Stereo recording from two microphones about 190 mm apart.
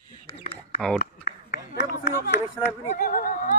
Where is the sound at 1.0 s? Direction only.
65° left (ahead or behind).